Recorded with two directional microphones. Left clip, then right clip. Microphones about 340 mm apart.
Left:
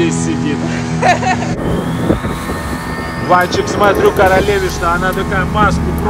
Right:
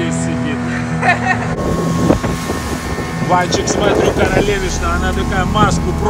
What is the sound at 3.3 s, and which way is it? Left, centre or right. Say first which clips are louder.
Speech: left 3 dB; centre.